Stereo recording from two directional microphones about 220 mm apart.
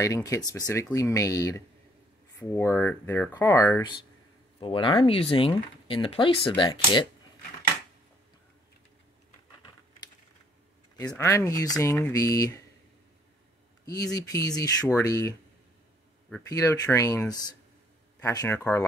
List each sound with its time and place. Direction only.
0.0 s speech: 15° left (ahead or behind)
11.1 s speech: 10° left (ahead or behind)
13.8 s speech: 15° left (ahead or behind)
16.4 s speech: 15° left (ahead or behind)